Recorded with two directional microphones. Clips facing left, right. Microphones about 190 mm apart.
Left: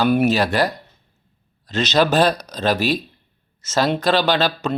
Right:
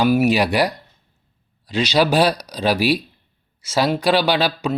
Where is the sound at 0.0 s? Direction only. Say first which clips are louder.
Right 1 dB; 10° right (ahead or behind).